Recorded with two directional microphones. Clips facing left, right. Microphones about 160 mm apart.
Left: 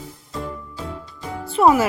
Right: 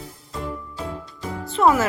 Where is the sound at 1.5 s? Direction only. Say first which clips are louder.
Left 2 dB; 10° left (ahead or behind).